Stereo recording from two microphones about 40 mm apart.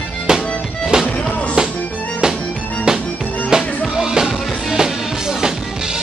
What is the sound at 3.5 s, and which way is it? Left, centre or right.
Music, centre.